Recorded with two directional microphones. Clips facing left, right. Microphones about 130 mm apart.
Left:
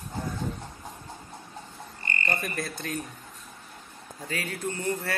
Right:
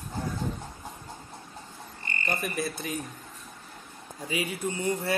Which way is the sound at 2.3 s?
5° right (ahead or behind).